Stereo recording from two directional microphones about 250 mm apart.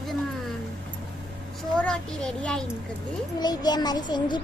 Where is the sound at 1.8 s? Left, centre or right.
Centre.